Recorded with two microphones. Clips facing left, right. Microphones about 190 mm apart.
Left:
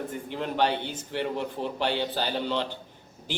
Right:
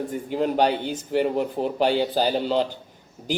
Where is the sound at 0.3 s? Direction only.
40° right (ahead or behind).